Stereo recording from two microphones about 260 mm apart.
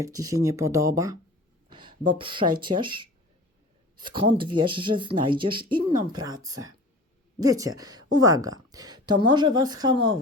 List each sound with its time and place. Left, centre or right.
0.0 s speech: centre
1.7 s a sound: centre
2.1 s a woman's voice: centre